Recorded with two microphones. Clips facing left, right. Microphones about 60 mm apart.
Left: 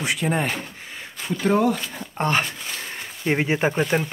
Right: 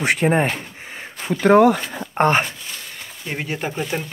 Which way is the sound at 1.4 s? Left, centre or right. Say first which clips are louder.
Right 7 dB; right.